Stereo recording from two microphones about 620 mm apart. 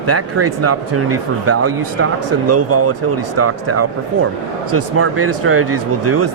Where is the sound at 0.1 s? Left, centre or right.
Right.